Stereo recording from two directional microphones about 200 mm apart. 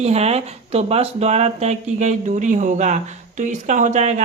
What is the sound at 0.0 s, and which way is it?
Speech, 30° right (ahead or behind).